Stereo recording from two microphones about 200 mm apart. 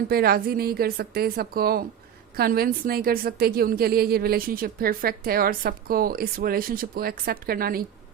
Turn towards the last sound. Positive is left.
turn(degrees=-50)  # may be behind; listen again after turning